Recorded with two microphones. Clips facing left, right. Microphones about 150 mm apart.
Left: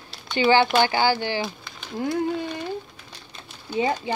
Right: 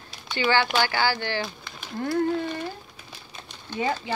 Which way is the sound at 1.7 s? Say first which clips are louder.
Left 2 dB; 5° right (ahead or behind).